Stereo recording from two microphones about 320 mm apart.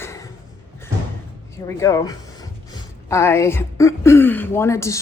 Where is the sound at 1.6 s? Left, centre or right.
Centre.